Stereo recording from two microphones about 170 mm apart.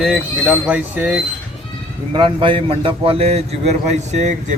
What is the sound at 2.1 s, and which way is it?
A man's voice, 30° right (ahead or behind).